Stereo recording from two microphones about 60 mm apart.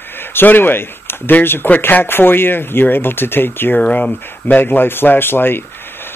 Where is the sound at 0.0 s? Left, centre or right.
Left.